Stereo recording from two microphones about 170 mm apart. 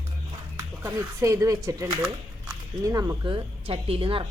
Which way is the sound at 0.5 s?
15° right (ahead or behind).